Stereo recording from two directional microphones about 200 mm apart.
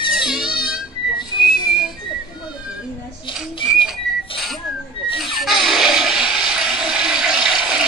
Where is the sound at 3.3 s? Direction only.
25° left (ahead or behind).